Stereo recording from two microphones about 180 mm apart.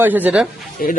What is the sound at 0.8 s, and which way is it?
Speech, 50° left (ahead or behind).